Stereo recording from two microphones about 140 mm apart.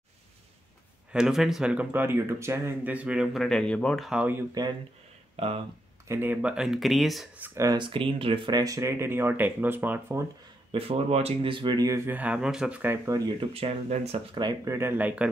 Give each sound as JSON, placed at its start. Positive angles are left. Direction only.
{"t": 1.1, "sound": "speech", "side_deg": 0}
{"t": 5.3, "sound": "speech", "side_deg": -45}
{"t": 6.0, "sound": "speech", "side_deg": -15}
{"t": 7.3, "sound": "speech", "side_deg": -15}
{"t": 7.7, "sound": "speech", "side_deg": -35}
{"t": 10.7, "sound": "speech", "side_deg": -45}
{"t": 12.1, "sound": "speech", "side_deg": -10}
{"t": 13.5, "sound": "speech", "side_deg": -45}
{"t": 14.3, "sound": "speech", "side_deg": -25}